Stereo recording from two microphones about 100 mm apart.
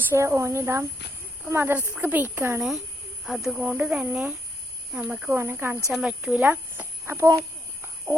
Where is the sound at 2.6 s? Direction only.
5° right (ahead or behind).